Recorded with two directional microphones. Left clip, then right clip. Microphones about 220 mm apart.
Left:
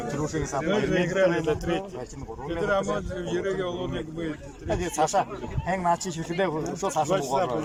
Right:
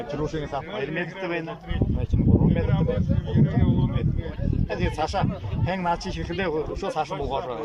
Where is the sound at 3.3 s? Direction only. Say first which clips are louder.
Even; 60° left (ahead or behind).